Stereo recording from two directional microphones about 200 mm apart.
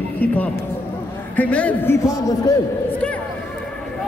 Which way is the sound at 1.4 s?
5° left (ahead or behind).